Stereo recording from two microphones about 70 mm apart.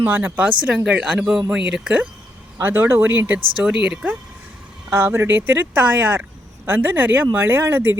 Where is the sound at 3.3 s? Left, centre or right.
Centre.